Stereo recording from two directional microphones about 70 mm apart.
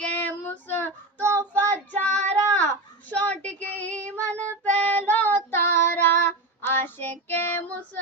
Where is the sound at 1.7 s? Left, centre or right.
Left.